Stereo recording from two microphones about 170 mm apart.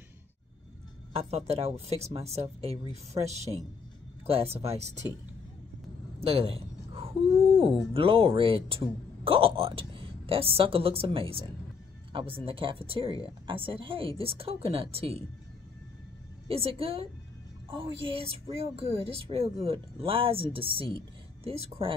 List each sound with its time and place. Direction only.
1.1 s speech: 35° right (ahead or behind)
6.2 s a sound: 35° right (ahead or behind)
7.9 s speech: 30° right (ahead or behind)
16.4 s speech: 35° right (ahead or behind)